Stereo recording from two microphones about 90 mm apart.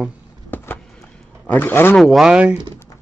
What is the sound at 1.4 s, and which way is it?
Speech, 20° left (ahead or behind).